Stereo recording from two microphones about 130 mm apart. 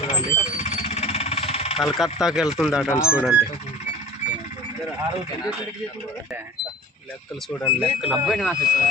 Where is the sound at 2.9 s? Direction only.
25° left (ahead or behind).